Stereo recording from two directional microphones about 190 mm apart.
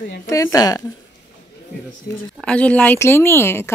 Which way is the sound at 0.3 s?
15° left (ahead or behind).